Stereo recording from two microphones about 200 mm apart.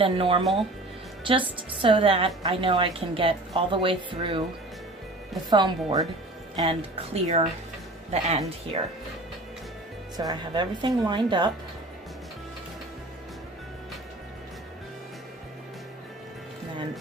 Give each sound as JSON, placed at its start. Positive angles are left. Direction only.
{"t": 0.0, "sound": "a woman's voice", "side_deg": -25}
{"t": 5.5, "sound": "a woman's voice", "side_deg": -20}
{"t": 10.2, "sound": "a woman's voice", "side_deg": -20}